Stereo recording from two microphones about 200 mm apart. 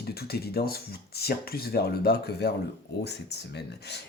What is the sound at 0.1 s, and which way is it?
Speech, 50° left (ahead or behind).